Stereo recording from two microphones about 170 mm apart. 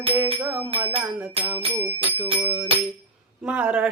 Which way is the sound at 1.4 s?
35° right (ahead or behind).